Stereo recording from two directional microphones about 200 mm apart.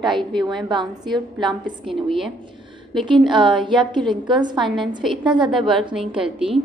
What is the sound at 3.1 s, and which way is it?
A woman's voice, 25° right (ahead or behind).